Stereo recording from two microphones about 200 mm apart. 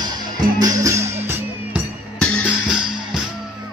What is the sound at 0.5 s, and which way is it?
Music, 15° right (ahead or behind).